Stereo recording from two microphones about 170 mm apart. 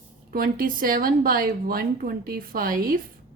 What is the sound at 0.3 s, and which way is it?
A woman's voice, 55° right (ahead or behind).